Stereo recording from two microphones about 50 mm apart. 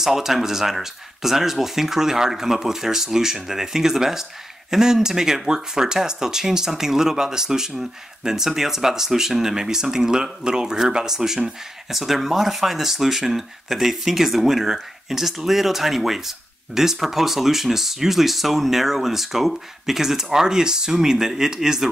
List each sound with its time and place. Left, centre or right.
0.0 s speech: centre